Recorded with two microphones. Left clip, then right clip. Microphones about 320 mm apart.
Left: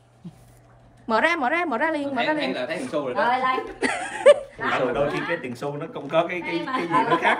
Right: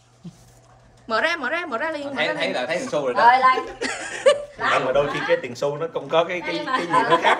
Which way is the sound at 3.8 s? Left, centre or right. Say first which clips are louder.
Left 3 dB; left.